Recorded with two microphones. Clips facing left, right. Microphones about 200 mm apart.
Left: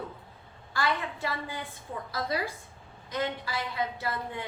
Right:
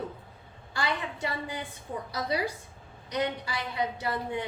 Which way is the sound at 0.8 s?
20° right (ahead or behind).